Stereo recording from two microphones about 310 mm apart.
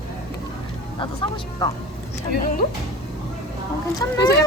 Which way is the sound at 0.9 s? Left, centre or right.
Centre.